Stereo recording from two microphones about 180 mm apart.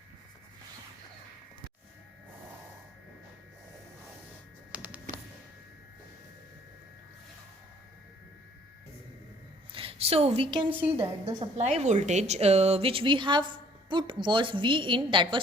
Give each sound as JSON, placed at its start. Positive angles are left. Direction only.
{"t": 4.7, "sound": "a sound", "side_deg": -10}
{"t": 9.7, "sound": "a woman's voice", "side_deg": -35}
{"t": 10.7, "sound": "a woman's voice", "side_deg": -10}
{"t": 11.3, "sound": "a woman's voice", "side_deg": -40}